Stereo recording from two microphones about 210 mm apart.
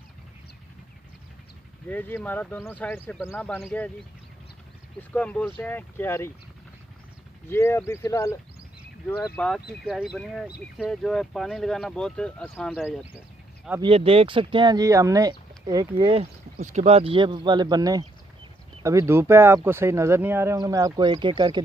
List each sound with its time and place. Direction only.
1.9 s speech: 10° left (ahead or behind)
5.1 s speech: 5° left (ahead or behind)
7.4 s speech: 10° left (ahead or behind)
9.8 s speech: 5° right (ahead or behind)
13.7 s speech: 25° right (ahead or behind)
16.5 s speech: 35° right (ahead or behind)